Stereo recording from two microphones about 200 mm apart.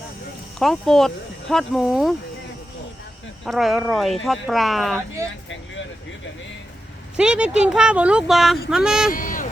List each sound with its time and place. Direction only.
0.6 s speech: centre (ahead or behind)
3.4 s speech: centre (ahead or behind)
7.2 s speech: 5° right (ahead or behind)
9.1 s a sound: 40° left (ahead or behind)